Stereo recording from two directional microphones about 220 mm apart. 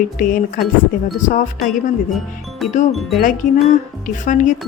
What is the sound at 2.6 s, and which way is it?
Speech, centre (ahead or behind).